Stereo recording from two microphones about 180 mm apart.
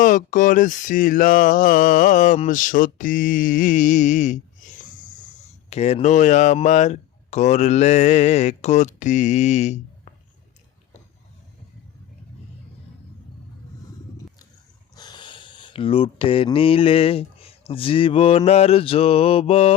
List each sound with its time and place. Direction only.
0.0 s a sound: 45° left (ahead or behind)
5.7 s speech: 35° left (ahead or behind)
14.9 s speech: 25° left (ahead or behind)